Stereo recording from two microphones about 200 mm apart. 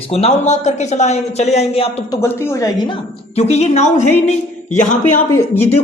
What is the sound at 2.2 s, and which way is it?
Speech, 15° left (ahead or behind).